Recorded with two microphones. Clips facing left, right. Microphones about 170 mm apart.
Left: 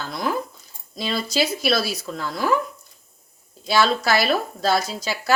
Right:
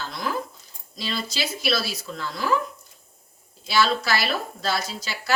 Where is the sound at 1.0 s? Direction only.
45° left (ahead or behind).